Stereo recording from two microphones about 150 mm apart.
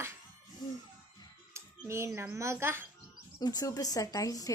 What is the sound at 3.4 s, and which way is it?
Speech, 25° left (ahead or behind).